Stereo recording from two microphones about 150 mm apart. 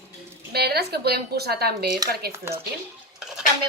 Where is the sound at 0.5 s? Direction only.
90° right.